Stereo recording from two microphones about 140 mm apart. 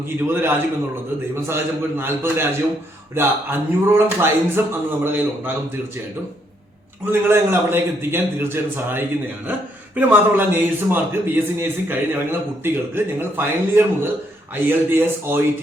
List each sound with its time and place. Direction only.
0.3 s a man's voice: 15° right (ahead or behind)
7.0 s a man's voice: 15° right (ahead or behind)